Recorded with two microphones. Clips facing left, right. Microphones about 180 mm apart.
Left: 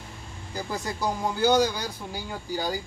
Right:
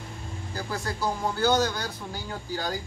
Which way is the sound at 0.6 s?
15° left (ahead or behind).